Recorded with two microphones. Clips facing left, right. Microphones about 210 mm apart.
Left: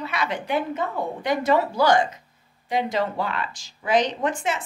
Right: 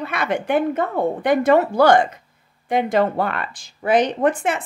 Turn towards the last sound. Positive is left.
turn(degrees=-55)  # may be behind; listen again after turning